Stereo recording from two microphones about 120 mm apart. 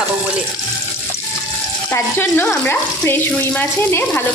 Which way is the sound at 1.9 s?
15° left (ahead or behind).